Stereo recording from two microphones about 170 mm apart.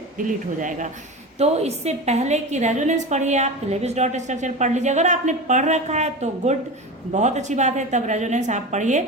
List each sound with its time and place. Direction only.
0.2 s a woman's voice: 50° right (ahead or behind)
1.4 s a woman's voice: 40° right (ahead or behind)